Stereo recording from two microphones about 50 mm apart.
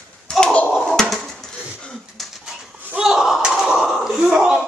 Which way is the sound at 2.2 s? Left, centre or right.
Centre.